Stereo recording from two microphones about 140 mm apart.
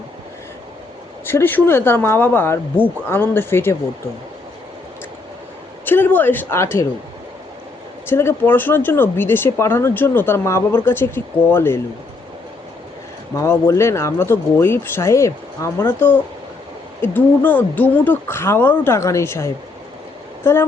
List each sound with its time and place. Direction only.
1.2 s speech: 15° left (ahead or behind)
5.8 s speech: 15° left (ahead or behind)
8.0 s speech: 15° left (ahead or behind)
13.3 s speech: 20° left (ahead or behind)